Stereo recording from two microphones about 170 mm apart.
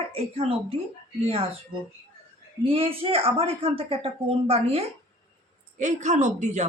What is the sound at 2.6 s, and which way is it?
A woman's voice, 35° right (ahead or behind).